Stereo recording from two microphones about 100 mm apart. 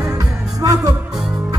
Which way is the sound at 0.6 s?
35° right (ahead or behind).